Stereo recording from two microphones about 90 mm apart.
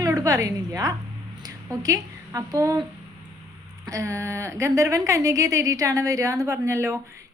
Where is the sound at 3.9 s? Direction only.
35° right (ahead or behind).